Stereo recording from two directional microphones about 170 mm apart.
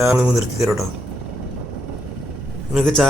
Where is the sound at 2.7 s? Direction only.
Centre (ahead or behind).